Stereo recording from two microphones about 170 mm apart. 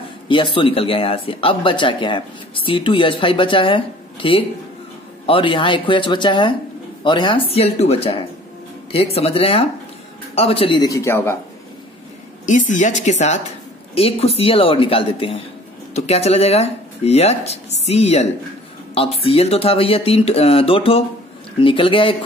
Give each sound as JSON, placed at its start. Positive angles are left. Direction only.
{"t": 0.3, "sound": "speech", "side_deg": 30}
{"t": 12.4, "sound": "speech", "side_deg": 45}